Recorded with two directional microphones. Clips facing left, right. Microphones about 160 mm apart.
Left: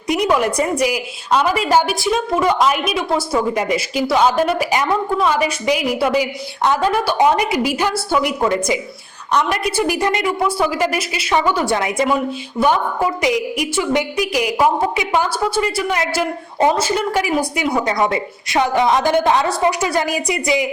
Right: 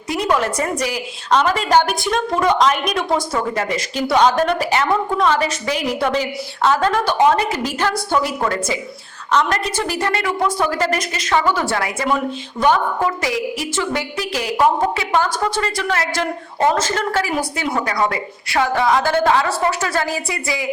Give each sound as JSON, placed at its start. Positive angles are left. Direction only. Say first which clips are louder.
{"t": 0.1, "sound": "a woman's voice", "louder": "left 3 dB", "side_deg": 15}